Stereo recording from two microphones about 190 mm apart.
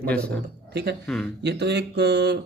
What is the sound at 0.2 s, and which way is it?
Speech, 60° right (ahead or behind).